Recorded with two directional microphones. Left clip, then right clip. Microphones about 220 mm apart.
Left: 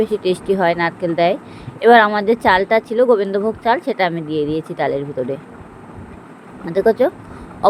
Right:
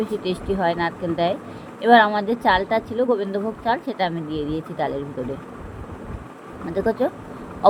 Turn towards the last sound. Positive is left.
turn(degrees=30)  # may be behind; listen again after turning